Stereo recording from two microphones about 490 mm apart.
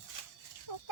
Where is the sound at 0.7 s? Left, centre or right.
Left.